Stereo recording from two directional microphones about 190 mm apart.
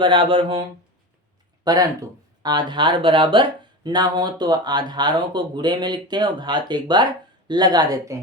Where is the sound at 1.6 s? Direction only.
20° right (ahead or behind).